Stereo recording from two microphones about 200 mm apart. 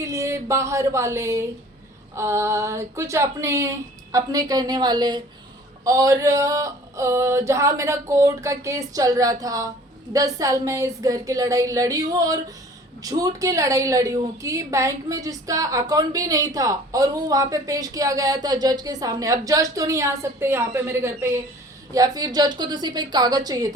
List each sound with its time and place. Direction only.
0.0 s a woman's voice: 15° right (ahead or behind)